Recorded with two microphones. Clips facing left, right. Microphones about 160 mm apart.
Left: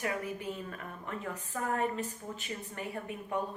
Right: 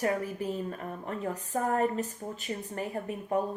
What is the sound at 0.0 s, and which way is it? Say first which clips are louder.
A woman's voice: right 5 dB; 40° right (ahead or behind).